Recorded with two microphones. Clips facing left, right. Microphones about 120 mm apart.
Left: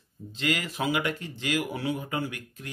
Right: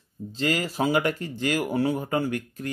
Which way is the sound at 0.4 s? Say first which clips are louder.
Right 4 dB; 35° right (ahead or behind).